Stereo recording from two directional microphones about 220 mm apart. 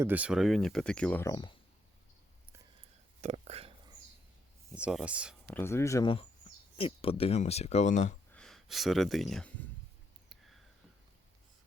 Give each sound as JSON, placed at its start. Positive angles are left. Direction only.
{"t": 0.0, "sound": "speech", "side_deg": -5}
{"t": 3.2, "sound": "speech", "side_deg": -30}
{"t": 4.7, "sound": "speech", "side_deg": -5}
{"t": 5.5, "sound": "speech", "side_deg": 10}
{"t": 8.3, "sound": "speech", "side_deg": 5}
{"t": 10.2, "sound": "a sound", "side_deg": 0}